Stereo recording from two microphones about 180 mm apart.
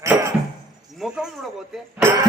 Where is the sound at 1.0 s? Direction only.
Centre (ahead or behind).